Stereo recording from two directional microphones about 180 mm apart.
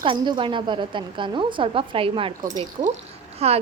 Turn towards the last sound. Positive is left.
turn(degrees=-35)  # may be behind; listen again after turning